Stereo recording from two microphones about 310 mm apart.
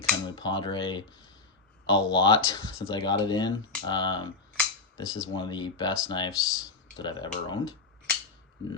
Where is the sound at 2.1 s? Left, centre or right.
Centre.